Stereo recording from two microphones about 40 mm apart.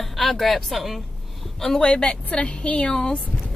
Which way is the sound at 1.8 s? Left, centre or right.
Left.